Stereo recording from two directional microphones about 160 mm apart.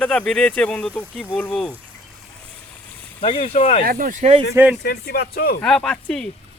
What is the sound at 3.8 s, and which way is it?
Speech, 60° right (ahead or behind).